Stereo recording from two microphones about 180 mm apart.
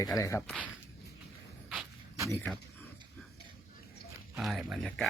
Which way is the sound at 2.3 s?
10° left (ahead or behind).